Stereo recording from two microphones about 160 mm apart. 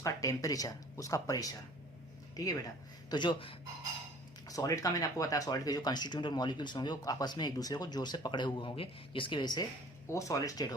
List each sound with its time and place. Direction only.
0.0 s speech: 20° left (ahead or behind)